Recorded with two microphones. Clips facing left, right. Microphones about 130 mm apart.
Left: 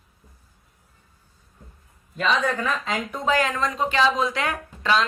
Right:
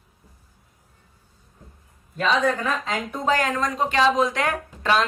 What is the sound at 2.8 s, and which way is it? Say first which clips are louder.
Speech: right 1 dB; 40° right (ahead or behind).